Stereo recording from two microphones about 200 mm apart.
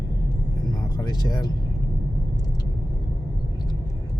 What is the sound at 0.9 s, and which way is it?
Speech, 20° left (ahead or behind).